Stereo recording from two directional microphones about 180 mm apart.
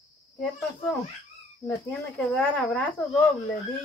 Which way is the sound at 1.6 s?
5° left (ahead or behind).